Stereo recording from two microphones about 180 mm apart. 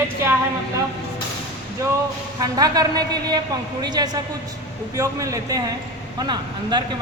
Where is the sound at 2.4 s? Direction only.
20° right (ahead or behind).